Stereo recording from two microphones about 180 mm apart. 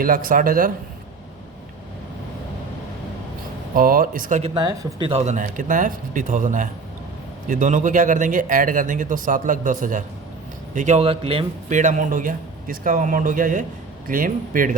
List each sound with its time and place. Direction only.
0.0 s a man's voice: 50° right (ahead or behind)
3.8 s a man's voice: 50° right (ahead or behind)
4.5 s a man's voice: 25° right (ahead or behind)
11.8 s a man's voice: 45° right (ahead or behind)